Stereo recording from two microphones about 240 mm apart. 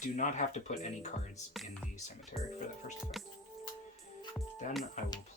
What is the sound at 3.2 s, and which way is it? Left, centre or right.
Music, centre.